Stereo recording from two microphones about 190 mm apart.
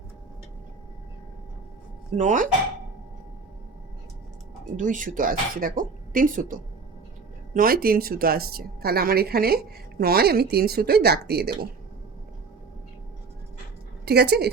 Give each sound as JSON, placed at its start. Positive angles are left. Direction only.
{"t": 2.1, "sound": "speech", "side_deg": -40}
{"t": 4.8, "sound": "speech", "side_deg": -45}
{"t": 14.0, "sound": "speech", "side_deg": -60}